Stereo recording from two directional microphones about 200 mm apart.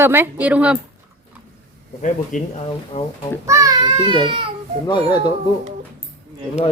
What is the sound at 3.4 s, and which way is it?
A child's voice, 15° right (ahead or behind).